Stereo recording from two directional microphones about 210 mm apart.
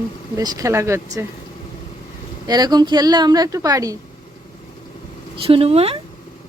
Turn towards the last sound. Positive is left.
turn(degrees=-30)  # may be behind; listen again after turning